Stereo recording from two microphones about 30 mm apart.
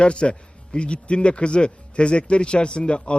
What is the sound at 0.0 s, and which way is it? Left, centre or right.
A man's voice, left.